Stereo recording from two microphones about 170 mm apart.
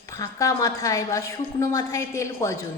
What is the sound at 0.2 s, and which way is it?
A woman's voice, 20° left (ahead or behind).